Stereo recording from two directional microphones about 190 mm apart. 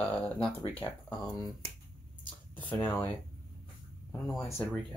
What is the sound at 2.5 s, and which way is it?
Speech, 10° left (ahead or behind).